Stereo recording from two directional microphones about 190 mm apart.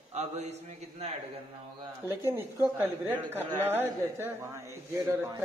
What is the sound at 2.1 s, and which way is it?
Speech, 15° right (ahead or behind).